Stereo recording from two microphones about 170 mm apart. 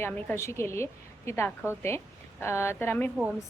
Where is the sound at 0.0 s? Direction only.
15° left (ahead or behind).